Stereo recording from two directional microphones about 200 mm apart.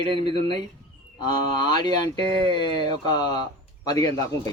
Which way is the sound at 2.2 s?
25° right (ahead or behind).